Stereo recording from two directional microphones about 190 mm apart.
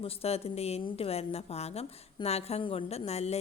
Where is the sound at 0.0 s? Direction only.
30° left (ahead or behind).